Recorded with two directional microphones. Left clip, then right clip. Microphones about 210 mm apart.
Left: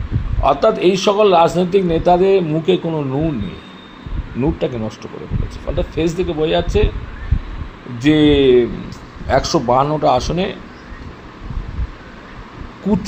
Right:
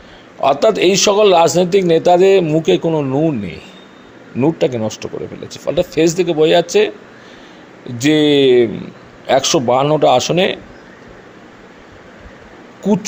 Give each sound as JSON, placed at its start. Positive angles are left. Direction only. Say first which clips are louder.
{"t": 0.4, "sound": "a man's voice", "louder": "right 2 dB", "side_deg": -55}
{"t": 4.4, "sound": "a man's voice", "louder": "right 5 dB", "side_deg": -50}
{"t": 7.9, "sound": "a man's voice", "louder": "right 1 dB", "side_deg": -55}
{"t": 12.8, "sound": "owl", "louder": "right 3 dB", "side_deg": -50}